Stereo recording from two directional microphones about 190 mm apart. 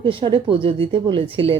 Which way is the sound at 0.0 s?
25° right (ahead or behind).